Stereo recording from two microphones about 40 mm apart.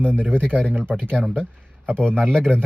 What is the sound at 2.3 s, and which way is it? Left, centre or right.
Speech, centre.